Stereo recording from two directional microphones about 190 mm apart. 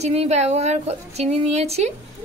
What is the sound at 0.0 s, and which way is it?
A woman's voice, 35° right (ahead or behind).